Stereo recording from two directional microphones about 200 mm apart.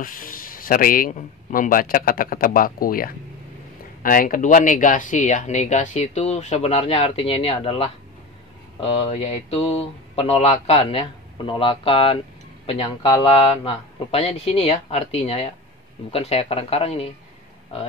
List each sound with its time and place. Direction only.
0.0 s a man's voice: 45° left (ahead or behind)